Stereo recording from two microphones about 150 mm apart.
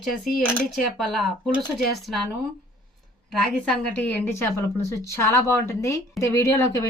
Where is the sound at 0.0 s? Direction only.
Centre (ahead or behind).